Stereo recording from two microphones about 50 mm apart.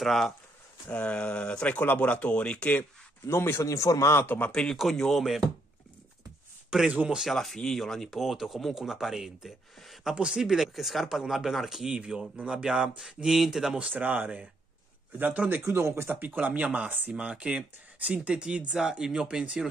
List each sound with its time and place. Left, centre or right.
0.0 s speech: centre
0.8 s speech: left
3.3 s a man's voice: left
4.5 s speech: centre
6.7 s speech: centre
7.2 s speech: centre
10.1 s speech: centre
12.0 s speech: centre
13.9 s speech: right
15.7 s speech: right; by 19.4 s centre